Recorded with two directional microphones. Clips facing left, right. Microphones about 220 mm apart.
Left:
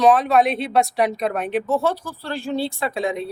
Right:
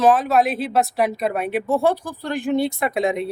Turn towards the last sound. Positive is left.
turn(degrees=-20)  # may be behind; listen again after turning